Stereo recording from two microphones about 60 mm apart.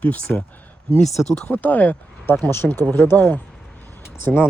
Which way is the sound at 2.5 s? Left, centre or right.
Left.